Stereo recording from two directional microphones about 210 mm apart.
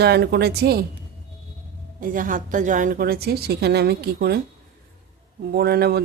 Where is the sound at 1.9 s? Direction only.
40° right (ahead or behind).